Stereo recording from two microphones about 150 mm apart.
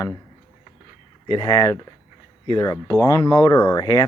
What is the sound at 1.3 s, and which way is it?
Speech, 25° left (ahead or behind).